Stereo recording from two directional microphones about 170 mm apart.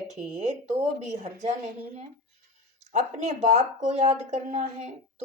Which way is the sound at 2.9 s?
40° right (ahead or behind).